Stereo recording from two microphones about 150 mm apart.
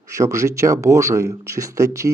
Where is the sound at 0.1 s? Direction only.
20° right (ahead or behind).